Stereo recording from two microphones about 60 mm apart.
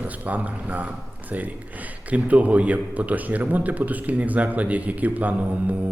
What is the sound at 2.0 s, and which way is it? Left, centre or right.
A man's voice, right.